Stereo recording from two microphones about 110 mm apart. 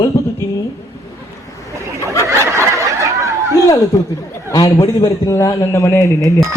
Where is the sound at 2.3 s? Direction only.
25° right (ahead or behind).